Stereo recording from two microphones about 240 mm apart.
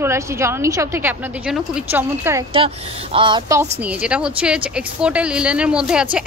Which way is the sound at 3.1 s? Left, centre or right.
Centre.